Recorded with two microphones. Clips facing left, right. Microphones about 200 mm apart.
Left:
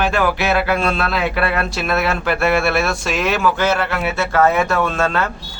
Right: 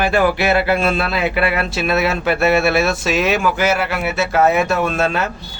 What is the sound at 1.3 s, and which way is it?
Speech, 25° right (ahead or behind).